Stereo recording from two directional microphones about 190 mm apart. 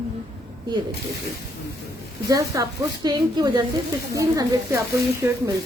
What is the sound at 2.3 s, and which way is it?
A woman's voice, 15° right (ahead or behind).